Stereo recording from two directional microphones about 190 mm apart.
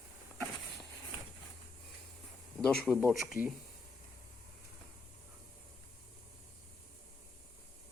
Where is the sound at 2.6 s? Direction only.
5° left (ahead or behind).